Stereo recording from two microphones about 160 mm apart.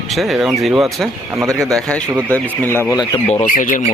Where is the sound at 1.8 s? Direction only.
5° left (ahead or behind).